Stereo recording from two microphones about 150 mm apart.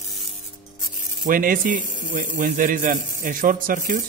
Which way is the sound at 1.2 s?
65° right (ahead or behind).